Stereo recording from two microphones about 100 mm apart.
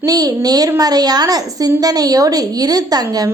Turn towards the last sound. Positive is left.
turn(degrees=-40)  # may be behind; listen again after turning